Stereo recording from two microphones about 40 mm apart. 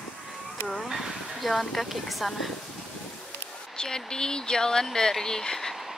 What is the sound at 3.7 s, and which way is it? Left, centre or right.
Speech, centre.